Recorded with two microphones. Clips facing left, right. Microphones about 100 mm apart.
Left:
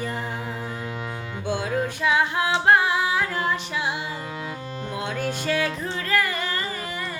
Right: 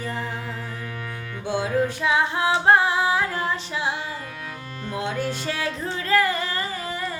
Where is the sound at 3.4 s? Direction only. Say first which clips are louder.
Even; 30° right (ahead or behind).